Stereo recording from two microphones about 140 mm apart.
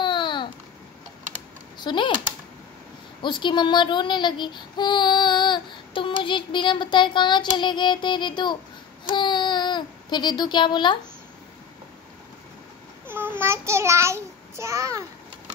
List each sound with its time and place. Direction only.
0.0 s babbling: 35° left (ahead or behind)
1.8 s speech: 35° left (ahead or behind)
3.2 s speech: 35° left (ahead or behind)
6.2 s child singing: 35° left (ahead or behind)
9.1 s a sound: 35° left (ahead or behind)
13.0 s child singing: 15° right (ahead or behind)